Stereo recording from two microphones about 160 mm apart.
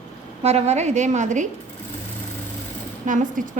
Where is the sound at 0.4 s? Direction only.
40° right (ahead or behind).